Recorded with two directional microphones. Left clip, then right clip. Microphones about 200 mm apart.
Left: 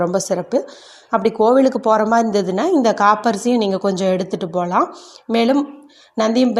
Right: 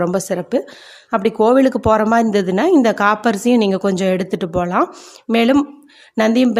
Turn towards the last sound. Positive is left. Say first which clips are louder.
# right 1 dB
turn(degrees=-20)  # may be behind; listen again after turning